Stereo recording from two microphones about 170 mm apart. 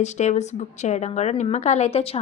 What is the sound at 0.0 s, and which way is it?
A woman's voice, 40° left (ahead or behind).